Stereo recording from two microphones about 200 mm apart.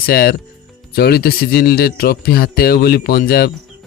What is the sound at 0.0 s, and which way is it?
Speech, 50° left (ahead or behind).